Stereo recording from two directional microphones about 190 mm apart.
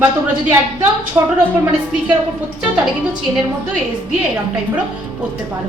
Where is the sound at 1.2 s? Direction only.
20° right (ahead or behind).